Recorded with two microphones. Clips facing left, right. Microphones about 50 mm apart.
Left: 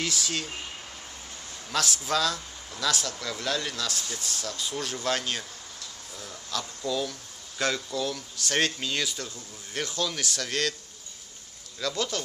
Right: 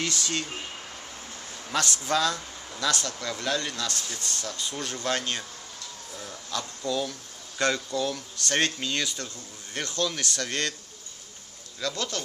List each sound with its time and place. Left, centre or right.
0.0 s speech: centre
1.7 s a man's voice: centre
6.1 s a sound: centre
6.8 s a man's voice: centre
11.8 s a man's voice: centre